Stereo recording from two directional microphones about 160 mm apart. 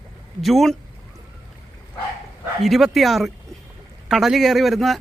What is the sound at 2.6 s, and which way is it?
Speech, centre (ahead or behind).